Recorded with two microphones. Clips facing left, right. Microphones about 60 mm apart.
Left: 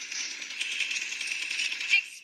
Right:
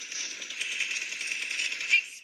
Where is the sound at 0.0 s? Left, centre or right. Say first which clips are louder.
Left 1 dB; left.